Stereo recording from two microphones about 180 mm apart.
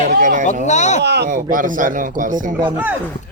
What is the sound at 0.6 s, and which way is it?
Speech, 40° left (ahead or behind).